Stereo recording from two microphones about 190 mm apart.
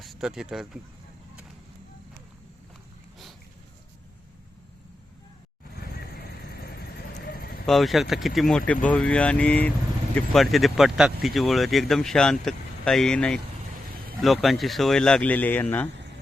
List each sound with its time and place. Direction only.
0.0 s speech: centre (ahead or behind)
6.5 s vehicle: 55° left (ahead or behind)
7.1 s a sound: 50° left (ahead or behind)
7.7 s speech: centre (ahead or behind)